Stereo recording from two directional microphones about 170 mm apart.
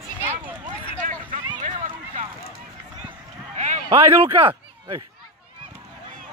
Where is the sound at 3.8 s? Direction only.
15° right (ahead or behind).